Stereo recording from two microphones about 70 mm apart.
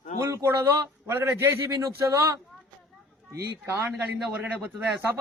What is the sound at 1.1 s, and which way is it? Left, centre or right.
A man's voice, right.